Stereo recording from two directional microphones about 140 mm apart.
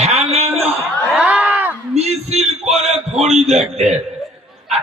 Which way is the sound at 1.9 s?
50° right (ahead or behind).